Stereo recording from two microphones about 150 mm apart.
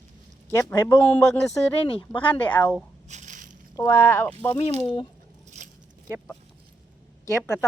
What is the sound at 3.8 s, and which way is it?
Speech, 20° left (ahead or behind).